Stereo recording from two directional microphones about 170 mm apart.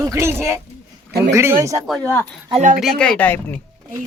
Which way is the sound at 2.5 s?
50° right (ahead or behind).